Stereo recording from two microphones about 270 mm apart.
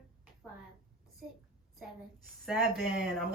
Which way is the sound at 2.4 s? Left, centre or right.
Centre.